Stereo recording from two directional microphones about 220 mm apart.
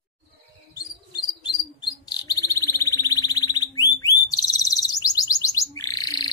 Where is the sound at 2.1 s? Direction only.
15° left (ahead or behind).